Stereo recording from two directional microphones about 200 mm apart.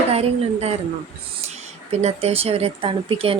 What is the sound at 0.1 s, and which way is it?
Speech, 30° right (ahead or behind).